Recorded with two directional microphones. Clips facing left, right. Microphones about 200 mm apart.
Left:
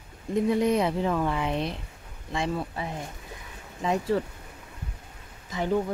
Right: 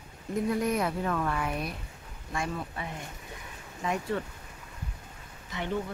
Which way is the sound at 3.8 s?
30° left (ahead or behind).